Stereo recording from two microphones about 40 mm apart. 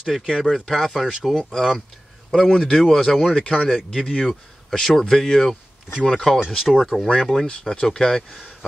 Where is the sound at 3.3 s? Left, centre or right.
Left.